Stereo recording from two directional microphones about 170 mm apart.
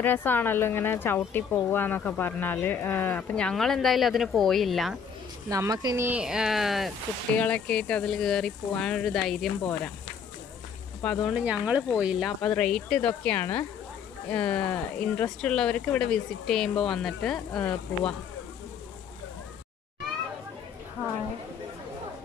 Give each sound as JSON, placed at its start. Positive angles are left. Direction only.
{"t": 0.0, "sound": "speech", "side_deg": 10}
{"t": 5.5, "sound": "speech", "side_deg": -20}
{"t": 6.0, "sound": "speech", "side_deg": -5}
{"t": 11.0, "sound": "speech", "side_deg": 5}
{"t": 11.3, "sound": "speech", "side_deg": -5}